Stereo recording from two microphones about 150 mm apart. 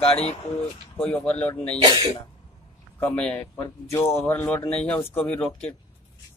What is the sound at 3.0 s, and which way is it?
Speech, 10° left (ahead or behind).